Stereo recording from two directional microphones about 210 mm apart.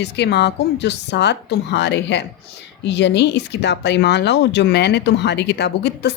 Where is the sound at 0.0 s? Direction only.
55° left (ahead or behind).